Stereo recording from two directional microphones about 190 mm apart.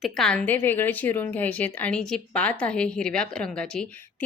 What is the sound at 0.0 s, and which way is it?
A woman's voice, 5° left (ahead or behind).